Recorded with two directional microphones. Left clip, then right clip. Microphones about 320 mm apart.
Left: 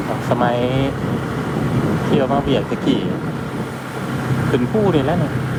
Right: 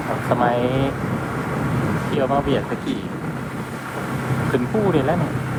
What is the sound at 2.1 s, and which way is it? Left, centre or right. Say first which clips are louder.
Speech: left 2 dB; centre.